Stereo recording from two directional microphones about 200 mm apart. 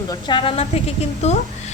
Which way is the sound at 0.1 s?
25° left (ahead or behind).